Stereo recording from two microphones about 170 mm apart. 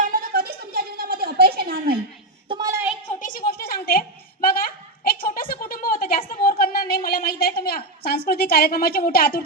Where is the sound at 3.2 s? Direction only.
55° left (ahead or behind).